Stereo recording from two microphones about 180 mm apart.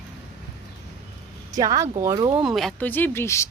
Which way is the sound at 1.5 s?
20° right (ahead or behind).